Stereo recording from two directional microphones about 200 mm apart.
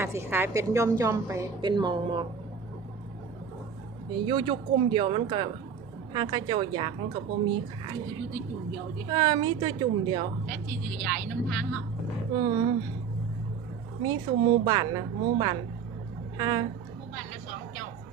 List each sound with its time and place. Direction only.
0.0 s a woman's voice: 10° right (ahead or behind)
4.1 s a woman's voice: 25° right (ahead or behind)
9.0 s a woman's voice: 20° right (ahead or behind)
11.0 s speech: 5° left (ahead or behind)
12.3 s a woman's voice: 20° right (ahead or behind)
14.0 s a woman's voice: 20° right (ahead or behind)